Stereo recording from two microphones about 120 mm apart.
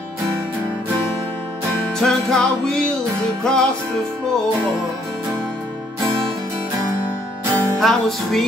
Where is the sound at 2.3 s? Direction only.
5° left (ahead or behind).